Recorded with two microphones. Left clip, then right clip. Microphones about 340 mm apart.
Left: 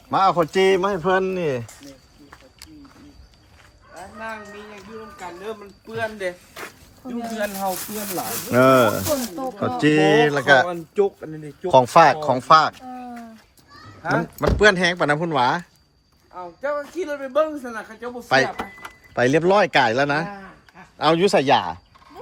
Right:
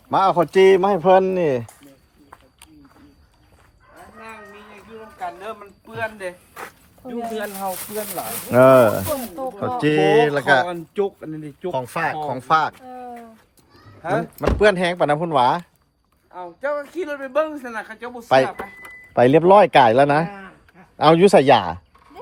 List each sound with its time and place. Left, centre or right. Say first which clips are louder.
0.1 s speech: right 1 dB; centre
5.4 s speech: even; centre
7.0 s a man's voice: even; right
8.5 s speech: right 3 dB; centre
10.9 s a man's voice: left 4 dB; right
11.7 s speech: left 11 dB; centre
14.3 s speech: even; centre
16.3 s a man's voice: right 1 dB; right